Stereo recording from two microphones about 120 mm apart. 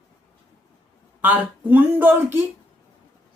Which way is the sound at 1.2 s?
15° right (ahead or behind).